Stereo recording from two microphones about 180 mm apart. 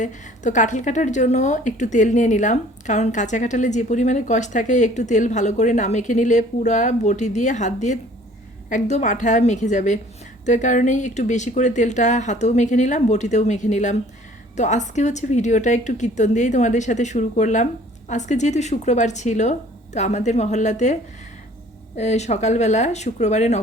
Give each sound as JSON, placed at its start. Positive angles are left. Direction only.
{"t": 0.0, "sound": "a woman's voice", "side_deg": 45}